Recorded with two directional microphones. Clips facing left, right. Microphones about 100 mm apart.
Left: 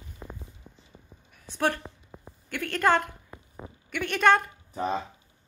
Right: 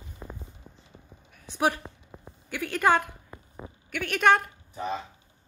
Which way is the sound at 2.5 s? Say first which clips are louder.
Even; 10° right (ahead or behind).